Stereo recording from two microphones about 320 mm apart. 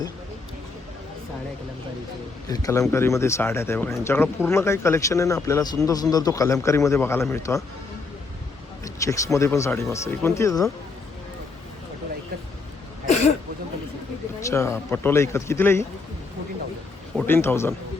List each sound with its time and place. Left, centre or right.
2.5 s speech: centre
8.8 s speech: centre
13.1 s throat clearing: left
14.4 s speech: centre
17.2 s speech: centre